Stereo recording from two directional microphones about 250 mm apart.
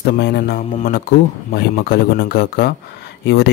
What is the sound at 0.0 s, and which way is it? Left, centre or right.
Speech, left.